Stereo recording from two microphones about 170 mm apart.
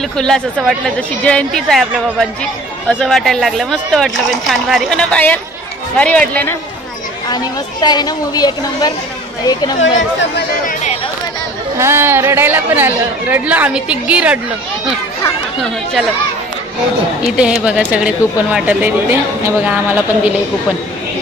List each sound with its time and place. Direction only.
0.2 s speech: centre (ahead or behind)
7.8 s a woman's voice: 25° left (ahead or behind)
9.8 s speech: 90° left
10.7 s speech: 45° left (ahead or behind)
11.8 s a woman's voice: 15° right (ahead or behind)
17.4 s a woman's voice: 5° right (ahead or behind)